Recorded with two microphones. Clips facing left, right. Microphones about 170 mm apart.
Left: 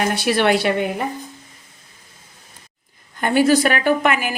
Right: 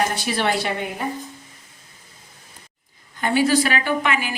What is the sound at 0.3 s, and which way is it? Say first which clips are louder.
Speech: left 6 dB; 65° left (ahead or behind).